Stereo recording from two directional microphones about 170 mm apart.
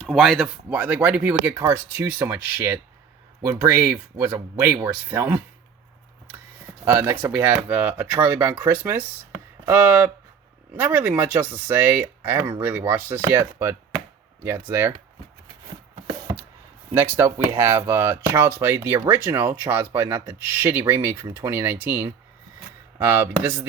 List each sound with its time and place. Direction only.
0.0 s speech: centre (ahead or behind)
6.8 s speech: 15° right (ahead or behind)
16.9 s speech: 15° right (ahead or behind)